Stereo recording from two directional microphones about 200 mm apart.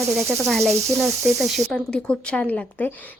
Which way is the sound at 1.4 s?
Centre (ahead or behind).